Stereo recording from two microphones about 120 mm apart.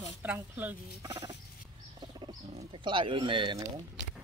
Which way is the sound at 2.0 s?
30° right (ahead or behind).